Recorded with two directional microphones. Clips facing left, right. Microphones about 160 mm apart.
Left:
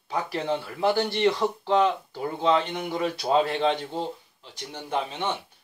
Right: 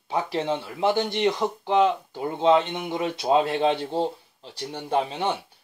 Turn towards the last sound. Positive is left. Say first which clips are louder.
# right 4 dB
turn(degrees=-35)  # may be behind; listen again after turning